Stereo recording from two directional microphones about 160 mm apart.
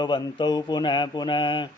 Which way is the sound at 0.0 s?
30° left (ahead or behind).